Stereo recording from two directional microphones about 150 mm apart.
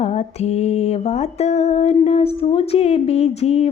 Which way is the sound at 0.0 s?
45° left (ahead or behind).